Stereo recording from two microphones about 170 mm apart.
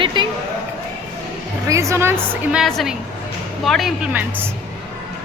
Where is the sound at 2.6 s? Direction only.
Centre (ahead or behind).